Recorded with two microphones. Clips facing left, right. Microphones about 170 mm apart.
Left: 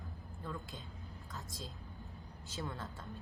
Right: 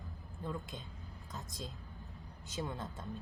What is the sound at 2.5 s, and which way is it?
Speech, 20° right (ahead or behind).